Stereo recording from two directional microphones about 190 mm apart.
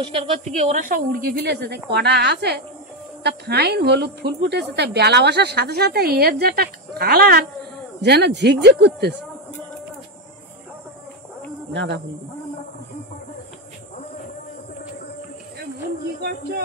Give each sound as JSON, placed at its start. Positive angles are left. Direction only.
{"t": 0.0, "sound": "a woman's voice", "side_deg": -30}
{"t": 0.6, "sound": "a woman's voice", "side_deg": -40}
{"t": 11.7, "sound": "a man's voice", "side_deg": -65}